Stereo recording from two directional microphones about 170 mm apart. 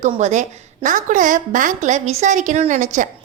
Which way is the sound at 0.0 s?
40° right (ahead or behind).